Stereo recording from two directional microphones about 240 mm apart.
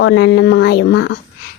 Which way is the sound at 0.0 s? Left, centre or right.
Left.